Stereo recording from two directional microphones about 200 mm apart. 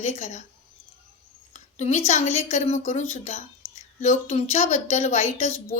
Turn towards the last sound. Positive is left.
turn(degrees=35)  # may be behind; listen again after turning